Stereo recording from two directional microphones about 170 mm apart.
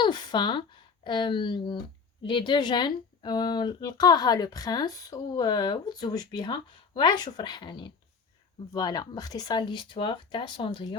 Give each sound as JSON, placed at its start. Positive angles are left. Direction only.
{"t": 0.0, "sound": "speech", "side_deg": 25}